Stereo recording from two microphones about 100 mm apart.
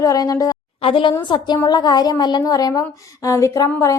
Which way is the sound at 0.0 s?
35° left (ahead or behind).